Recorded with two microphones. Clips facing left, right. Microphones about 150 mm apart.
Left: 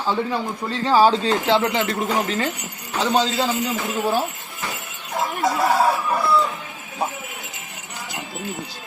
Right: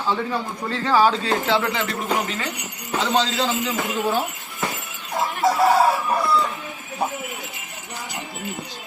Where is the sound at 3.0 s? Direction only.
10° left (ahead or behind).